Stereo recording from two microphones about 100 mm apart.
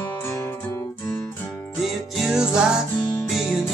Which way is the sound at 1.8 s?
Centre (ahead or behind).